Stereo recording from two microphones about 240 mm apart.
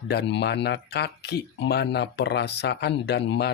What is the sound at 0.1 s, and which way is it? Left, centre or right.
Speech, left.